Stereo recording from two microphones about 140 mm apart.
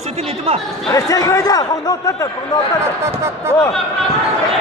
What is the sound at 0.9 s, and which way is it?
Speech, 25° left (ahead or behind).